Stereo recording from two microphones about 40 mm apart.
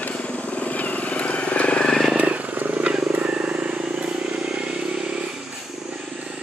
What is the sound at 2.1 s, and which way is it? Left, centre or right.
Vehicle, right.